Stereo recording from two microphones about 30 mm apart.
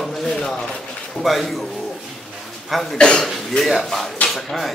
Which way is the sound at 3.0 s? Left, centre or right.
Left.